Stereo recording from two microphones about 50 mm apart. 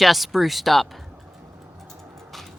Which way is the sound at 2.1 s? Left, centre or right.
Centre.